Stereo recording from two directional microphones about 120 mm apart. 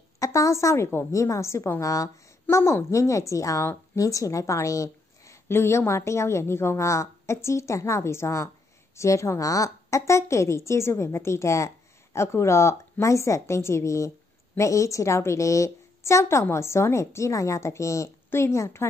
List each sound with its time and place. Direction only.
0.2 s a woman's voice: 25° left (ahead or behind)